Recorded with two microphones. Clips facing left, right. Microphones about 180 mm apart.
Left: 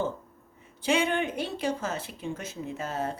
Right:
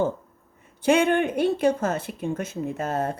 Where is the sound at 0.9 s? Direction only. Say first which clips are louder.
Right 6 dB; 55° right (ahead or behind).